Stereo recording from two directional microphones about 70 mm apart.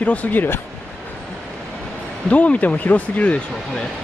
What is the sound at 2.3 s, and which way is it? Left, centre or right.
Speech, left.